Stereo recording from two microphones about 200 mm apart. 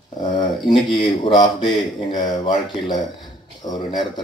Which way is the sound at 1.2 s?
25° left (ahead or behind).